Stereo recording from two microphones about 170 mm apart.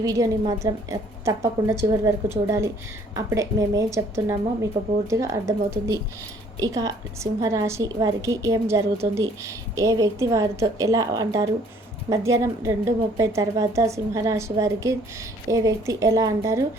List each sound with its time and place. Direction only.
0.0 s a woman's voice: 20° right (ahead or behind)